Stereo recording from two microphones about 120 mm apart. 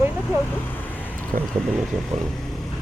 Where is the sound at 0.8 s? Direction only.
15° left (ahead or behind).